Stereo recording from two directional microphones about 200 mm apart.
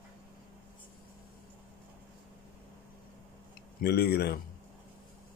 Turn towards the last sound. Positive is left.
turn(degrees=50)  # may be behind; listen again after turning